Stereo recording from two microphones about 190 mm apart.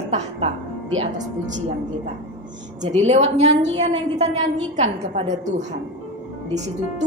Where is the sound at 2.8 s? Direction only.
35° right (ahead or behind).